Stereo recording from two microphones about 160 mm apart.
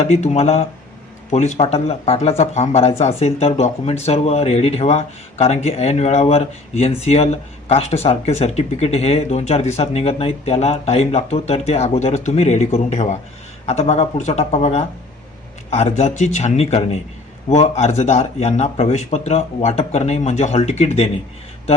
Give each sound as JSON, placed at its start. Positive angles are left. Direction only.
{"t": 0.0, "sound": "speech", "side_deg": 45}